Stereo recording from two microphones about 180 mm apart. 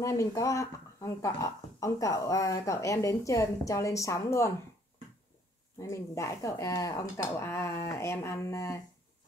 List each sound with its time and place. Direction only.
0.0 s speech: 15° left (ahead or behind)
5.8 s speech: 15° left (ahead or behind)